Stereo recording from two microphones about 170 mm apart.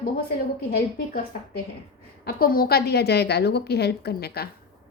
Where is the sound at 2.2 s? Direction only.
60° left (ahead or behind).